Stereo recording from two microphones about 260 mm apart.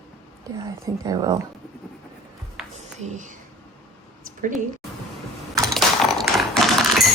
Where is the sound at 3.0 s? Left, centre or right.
Right.